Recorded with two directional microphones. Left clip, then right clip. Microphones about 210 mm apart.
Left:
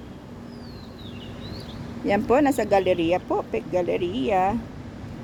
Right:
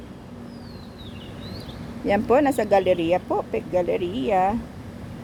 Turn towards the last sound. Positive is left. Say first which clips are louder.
# right 1 dB
turn(degrees=0)  # may be behind; listen again after turning